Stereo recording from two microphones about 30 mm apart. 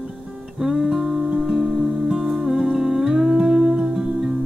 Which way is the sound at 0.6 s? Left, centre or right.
Centre.